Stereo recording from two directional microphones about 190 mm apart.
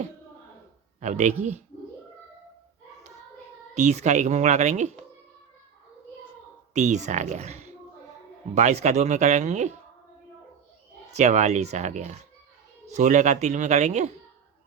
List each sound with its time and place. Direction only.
0.9 s speech: 40° right (ahead or behind)
3.8 s speech: 40° right (ahead or behind)
6.7 s speech: 40° right (ahead or behind)
11.1 s speech: 35° right (ahead or behind)